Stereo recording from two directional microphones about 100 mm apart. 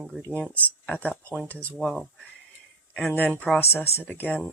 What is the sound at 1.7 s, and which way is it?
Speech, 10° right (ahead or behind).